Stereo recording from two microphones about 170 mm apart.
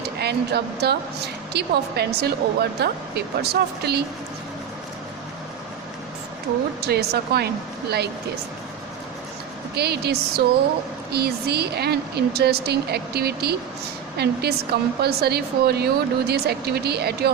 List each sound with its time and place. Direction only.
0.2 s a woman's voice: 75° right (ahead or behind)
6.8 s a woman's voice: 70° right (ahead or behind)
9.7 s a woman's voice: 70° right (ahead or behind)